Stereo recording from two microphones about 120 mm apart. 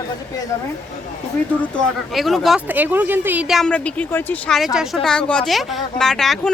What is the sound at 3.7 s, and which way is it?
Speech, 10° left (ahead or behind).